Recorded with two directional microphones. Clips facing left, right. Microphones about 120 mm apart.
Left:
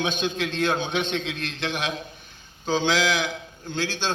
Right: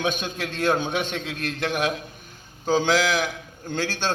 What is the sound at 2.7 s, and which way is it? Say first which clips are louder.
Speech: right 2 dB; 45° right (ahead or behind).